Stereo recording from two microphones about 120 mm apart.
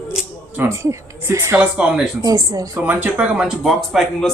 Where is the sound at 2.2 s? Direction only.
30° right (ahead or behind).